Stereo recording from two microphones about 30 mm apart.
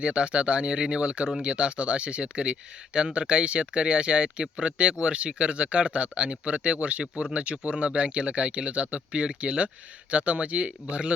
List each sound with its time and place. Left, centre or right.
0.0 s speech: right